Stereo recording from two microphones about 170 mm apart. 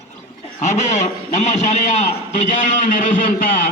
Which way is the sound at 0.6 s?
45° left (ahead or behind).